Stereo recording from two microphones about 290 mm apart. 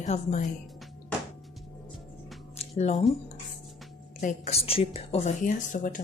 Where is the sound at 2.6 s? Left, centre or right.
Left.